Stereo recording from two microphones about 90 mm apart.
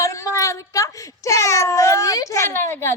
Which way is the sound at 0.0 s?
35° left (ahead or behind).